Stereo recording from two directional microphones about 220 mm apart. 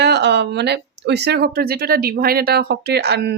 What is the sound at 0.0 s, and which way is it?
Speech, 50° right (ahead or behind).